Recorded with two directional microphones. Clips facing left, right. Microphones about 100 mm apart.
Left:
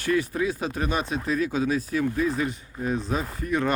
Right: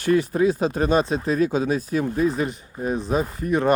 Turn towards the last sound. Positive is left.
turn(degrees=-25)  # may be behind; listen again after turning